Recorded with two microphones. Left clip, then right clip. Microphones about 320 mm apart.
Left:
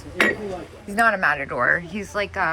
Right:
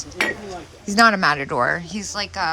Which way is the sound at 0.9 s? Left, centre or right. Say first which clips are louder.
Right 3 dB; centre.